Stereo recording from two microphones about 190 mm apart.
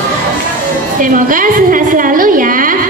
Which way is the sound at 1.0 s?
45° right (ahead or behind).